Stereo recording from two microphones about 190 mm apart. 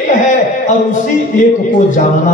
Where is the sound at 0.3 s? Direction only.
40° left (ahead or behind).